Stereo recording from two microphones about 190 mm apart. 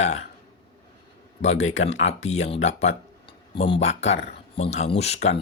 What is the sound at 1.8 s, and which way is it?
Speech, 85° left.